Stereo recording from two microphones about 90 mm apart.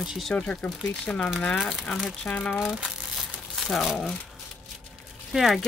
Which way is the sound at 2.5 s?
5° right (ahead or behind).